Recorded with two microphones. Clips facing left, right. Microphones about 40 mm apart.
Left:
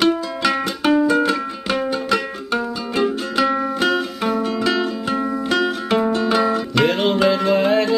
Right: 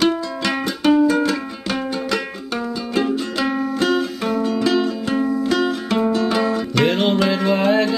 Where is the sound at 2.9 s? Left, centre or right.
Centre.